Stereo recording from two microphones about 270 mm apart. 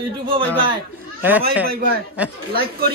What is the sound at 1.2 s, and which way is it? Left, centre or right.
Speech, centre.